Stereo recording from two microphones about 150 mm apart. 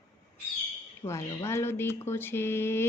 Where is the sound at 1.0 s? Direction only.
15° left (ahead or behind).